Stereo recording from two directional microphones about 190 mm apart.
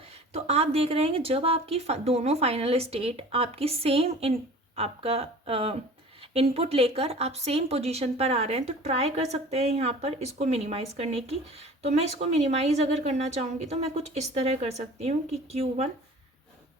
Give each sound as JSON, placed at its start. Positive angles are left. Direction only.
{"t": 0.4, "sound": "speech", "side_deg": -35}